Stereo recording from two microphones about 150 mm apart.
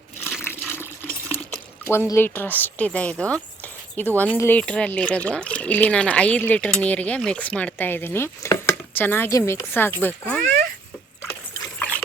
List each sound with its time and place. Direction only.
0.4 s water: 15° left (ahead or behind)
1.8 s speech: 15° left (ahead or behind)
2.0 s chopping: 15° left (ahead or behind)
11.8 s rowboat: 10° left (ahead or behind)